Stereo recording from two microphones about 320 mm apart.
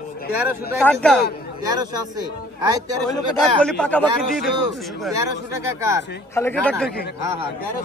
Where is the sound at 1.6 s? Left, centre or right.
Centre.